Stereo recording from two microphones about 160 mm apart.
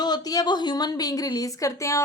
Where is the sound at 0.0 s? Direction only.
25° left (ahead or behind).